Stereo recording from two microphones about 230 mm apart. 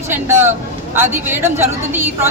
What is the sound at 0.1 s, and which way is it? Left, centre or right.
A woman's voice, centre.